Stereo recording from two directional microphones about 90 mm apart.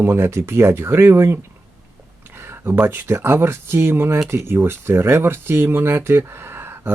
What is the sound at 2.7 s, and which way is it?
Speech, 25° right (ahead or behind).